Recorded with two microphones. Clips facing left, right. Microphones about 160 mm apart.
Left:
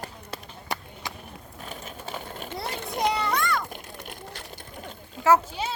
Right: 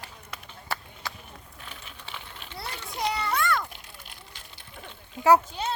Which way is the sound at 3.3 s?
Centre (ahead or behind).